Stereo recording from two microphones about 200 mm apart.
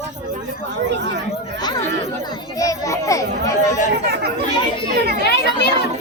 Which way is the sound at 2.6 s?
15° left (ahead or behind).